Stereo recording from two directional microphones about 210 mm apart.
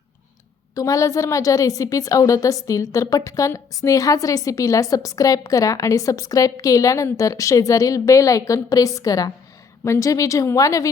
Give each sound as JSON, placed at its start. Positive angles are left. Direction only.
{"t": 0.8, "sound": "a woman's voice", "side_deg": 15}